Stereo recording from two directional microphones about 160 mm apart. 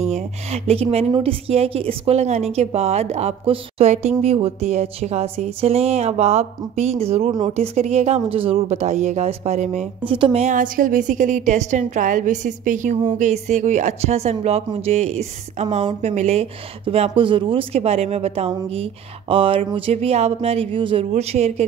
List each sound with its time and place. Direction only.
0.0 s a woman's voice: 45° right (ahead or behind)
10.1 s speech: 30° right (ahead or behind)
10.4 s a woman's voice: 55° right (ahead or behind)